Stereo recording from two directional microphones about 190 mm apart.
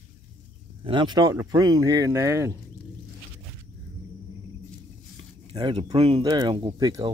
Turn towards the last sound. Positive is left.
turn(degrees=-20)  # may be behind; listen again after turning